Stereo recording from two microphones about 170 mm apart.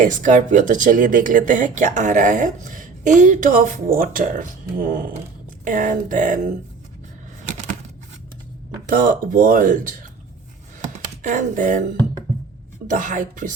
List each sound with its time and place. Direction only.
0.0 s speech: 50° right (ahead or behind)
8.9 s speech: 55° right (ahead or behind)
10.8 s a sound: 45° right (ahead or behind)
12.9 s speech: 50° right (ahead or behind)